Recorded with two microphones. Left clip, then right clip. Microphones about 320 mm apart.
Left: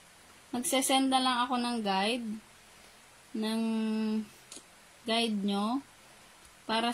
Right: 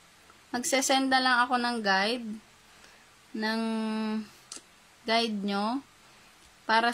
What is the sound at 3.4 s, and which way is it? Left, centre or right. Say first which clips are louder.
Speech: right 3 dB; right.